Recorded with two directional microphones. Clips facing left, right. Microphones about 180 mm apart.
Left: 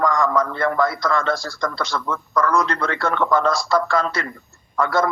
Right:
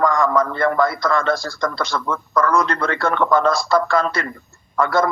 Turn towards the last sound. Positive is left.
turn(degrees=-55)  # may be behind; listen again after turning